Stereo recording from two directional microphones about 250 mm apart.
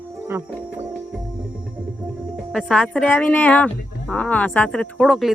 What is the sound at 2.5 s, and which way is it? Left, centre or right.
Speech, centre.